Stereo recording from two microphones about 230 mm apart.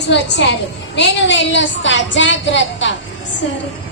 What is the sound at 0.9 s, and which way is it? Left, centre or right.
A woman's voice, left.